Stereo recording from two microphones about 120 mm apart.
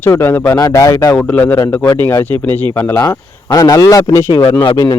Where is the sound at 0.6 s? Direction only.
30° left (ahead or behind).